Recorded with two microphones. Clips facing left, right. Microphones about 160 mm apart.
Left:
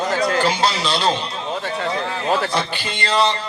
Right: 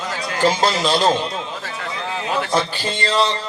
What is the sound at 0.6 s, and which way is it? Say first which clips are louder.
Speech: right 2 dB; 45° right (ahead or behind).